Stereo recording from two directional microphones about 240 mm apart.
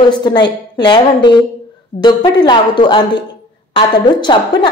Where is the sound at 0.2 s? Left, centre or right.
Centre.